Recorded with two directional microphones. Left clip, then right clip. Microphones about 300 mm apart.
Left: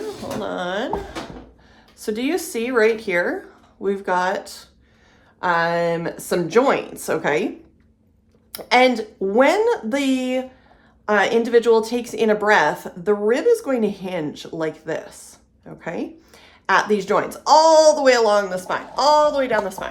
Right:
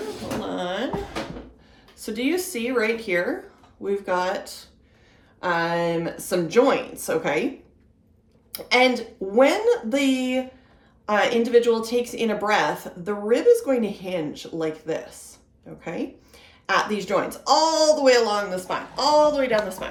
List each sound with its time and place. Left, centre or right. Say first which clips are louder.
0.4 s a sound: left 4 dB; centre
2.0 s a woman's voice: left 2 dB; left
8.5 s a woman's voice: left 3 dB; left